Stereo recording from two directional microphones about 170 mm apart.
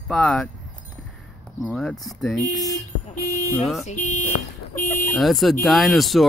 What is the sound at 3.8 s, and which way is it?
Speech, 45° left (ahead or behind).